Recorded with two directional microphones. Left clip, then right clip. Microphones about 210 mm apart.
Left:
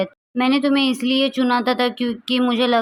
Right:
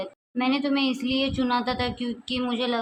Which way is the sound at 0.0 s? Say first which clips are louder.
Left 7 dB; 25° left (ahead or behind).